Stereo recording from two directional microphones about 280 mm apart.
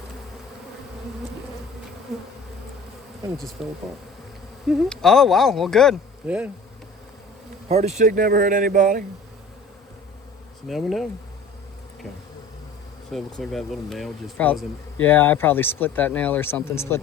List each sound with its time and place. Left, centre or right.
2.1 s speech: centre
3.6 s speech: centre
7.7 s a man's voice: right
10.7 s speech: centre
13.1 s speech: centre